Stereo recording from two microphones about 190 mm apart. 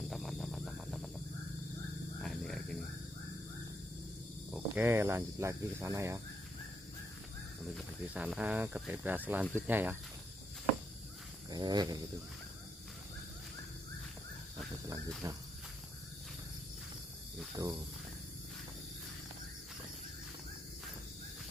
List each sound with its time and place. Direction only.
0.1 s a sound: centre (ahead or behind)
2.2 s a sound: centre (ahead or behind)
4.5 s cricket: centre (ahead or behind)
4.8 s speech: 15° right (ahead or behind)
8.1 s speech: 5° right (ahead or behind)
11.5 s speech: 20° right (ahead or behind)
15.2 s speech: 15° right (ahead or behind)
17.6 s speech: 15° right (ahead or behind)